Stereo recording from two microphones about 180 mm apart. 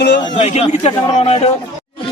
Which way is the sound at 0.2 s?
35° left (ahead or behind).